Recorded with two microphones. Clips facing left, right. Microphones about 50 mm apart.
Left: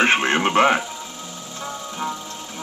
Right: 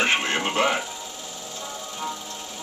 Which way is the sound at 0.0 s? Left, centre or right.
Left.